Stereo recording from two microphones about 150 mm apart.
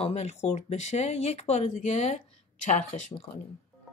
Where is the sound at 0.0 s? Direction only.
45° left (ahead or behind).